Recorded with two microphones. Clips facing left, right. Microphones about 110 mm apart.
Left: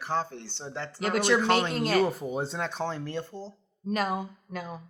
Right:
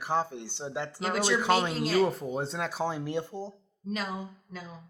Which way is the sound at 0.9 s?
55° left (ahead or behind).